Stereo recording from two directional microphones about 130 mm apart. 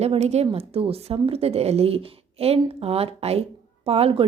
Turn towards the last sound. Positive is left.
turn(degrees=-45)  # may be behind; listen again after turning